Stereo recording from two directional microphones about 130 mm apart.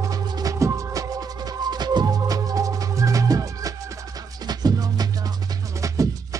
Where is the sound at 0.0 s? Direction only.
30° right (ahead or behind).